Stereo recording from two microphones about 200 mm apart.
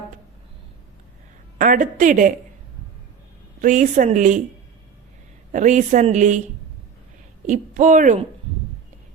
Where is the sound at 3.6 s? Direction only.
40° right (ahead or behind).